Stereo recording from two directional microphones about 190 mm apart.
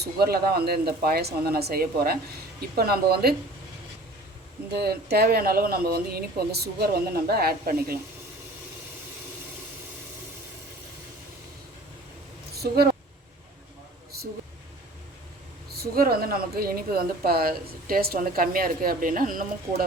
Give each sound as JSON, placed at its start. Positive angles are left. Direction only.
{"t": 0.0, "sound": "speech", "side_deg": -55}
{"t": 4.7, "sound": "speech", "side_deg": -60}
{"t": 12.5, "sound": "a sound", "side_deg": -55}
{"t": 15.7, "sound": "speech", "side_deg": -55}